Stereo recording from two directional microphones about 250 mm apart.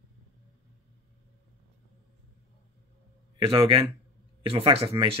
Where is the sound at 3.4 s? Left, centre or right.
Right.